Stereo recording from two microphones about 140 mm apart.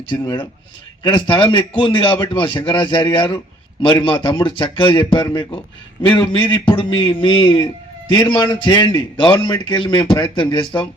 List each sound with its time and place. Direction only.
0.2 s a man's voice: 25° left (ahead or behind)
1.0 s a man's voice: 35° left (ahead or behind)